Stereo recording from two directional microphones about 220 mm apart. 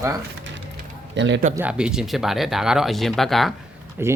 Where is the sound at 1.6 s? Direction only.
5° right (ahead or behind).